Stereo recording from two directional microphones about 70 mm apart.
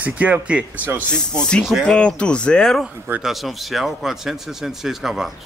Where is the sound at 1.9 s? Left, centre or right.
Centre.